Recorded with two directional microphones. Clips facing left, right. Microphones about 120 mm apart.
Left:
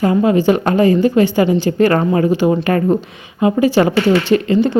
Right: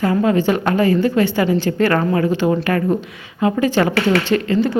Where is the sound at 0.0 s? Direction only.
20° left (ahead or behind).